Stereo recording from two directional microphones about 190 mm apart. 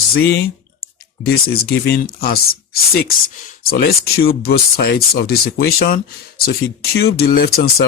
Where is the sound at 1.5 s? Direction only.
55° left (ahead or behind).